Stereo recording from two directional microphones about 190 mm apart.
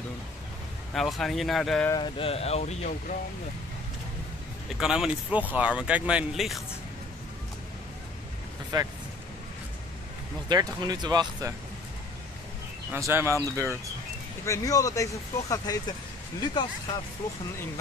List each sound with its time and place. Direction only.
0.9 s speech: centre (ahead or behind)
1.9 s speech: 25° left (ahead or behind)
4.7 s speech: 5° right (ahead or behind)
8.7 s speech: 20° right (ahead or behind)
10.5 s speech: 20° right (ahead or behind)
12.9 s speech: 10° right (ahead or behind)
14.4 s speech: 15° left (ahead or behind)